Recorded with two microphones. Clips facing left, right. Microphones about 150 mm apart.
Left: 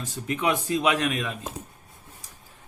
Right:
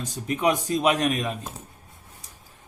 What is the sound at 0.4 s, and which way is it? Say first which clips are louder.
Speech: right 2 dB; 40° right (ahead or behind).